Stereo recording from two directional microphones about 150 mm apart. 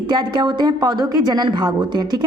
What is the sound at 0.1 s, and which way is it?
A woman's voice, 30° right (ahead or behind).